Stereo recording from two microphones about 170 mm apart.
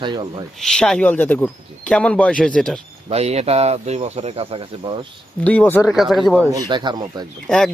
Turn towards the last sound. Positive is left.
turn(degrees=5)  # may be behind; listen again after turning